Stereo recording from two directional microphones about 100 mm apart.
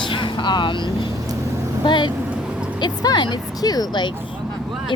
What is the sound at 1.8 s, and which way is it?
Speech, 50° left (ahead or behind).